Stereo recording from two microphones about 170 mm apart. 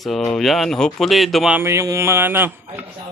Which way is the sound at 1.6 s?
15° right (ahead or behind).